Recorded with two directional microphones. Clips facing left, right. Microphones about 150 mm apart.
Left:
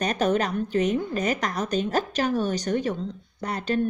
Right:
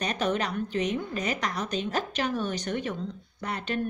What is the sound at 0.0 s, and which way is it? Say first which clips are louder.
A woman's voice: left 5 dB; 45° left (ahead or behind).